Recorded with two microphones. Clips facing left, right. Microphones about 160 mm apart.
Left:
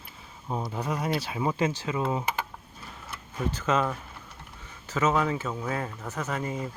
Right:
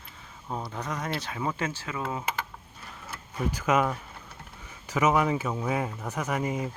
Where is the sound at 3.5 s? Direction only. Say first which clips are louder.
Right 2 dB; 10° right (ahead or behind).